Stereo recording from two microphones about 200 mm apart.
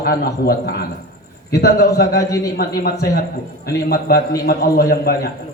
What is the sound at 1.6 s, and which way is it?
Speech, 50° left (ahead or behind).